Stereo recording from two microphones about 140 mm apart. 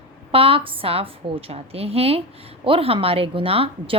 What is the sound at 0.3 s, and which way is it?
A woman's voice, 40° right (ahead or behind).